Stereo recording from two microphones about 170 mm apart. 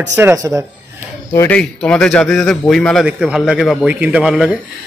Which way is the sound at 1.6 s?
5° left (ahead or behind).